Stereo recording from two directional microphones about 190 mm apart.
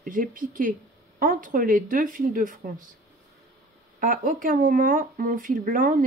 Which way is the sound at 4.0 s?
45° right (ahead or behind).